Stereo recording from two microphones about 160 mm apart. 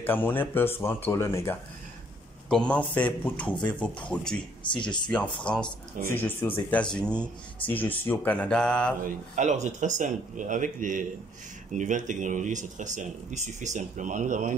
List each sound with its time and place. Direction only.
0.0 s speech: 10° left (ahead or behind)
2.5 s speech: 5° left (ahead or behind)
4.6 s speech: 30° left (ahead or behind)
5.0 s speech: 5° left (ahead or behind)
9.0 s speech: 55° right (ahead or behind)